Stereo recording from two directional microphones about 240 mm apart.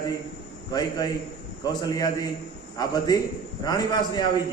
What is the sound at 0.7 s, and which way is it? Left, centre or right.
A man's voice, centre.